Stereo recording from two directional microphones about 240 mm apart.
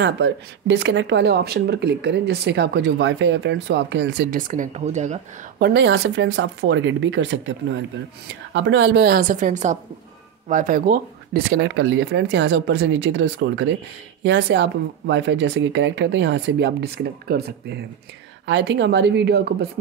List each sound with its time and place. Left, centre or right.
0.0 s speech: right
5.6 s a woman's voice: right